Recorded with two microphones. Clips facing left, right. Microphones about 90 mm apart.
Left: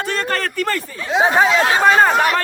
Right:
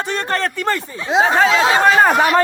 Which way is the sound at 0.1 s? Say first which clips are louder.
Right 2 dB; 20° right (ahead or behind).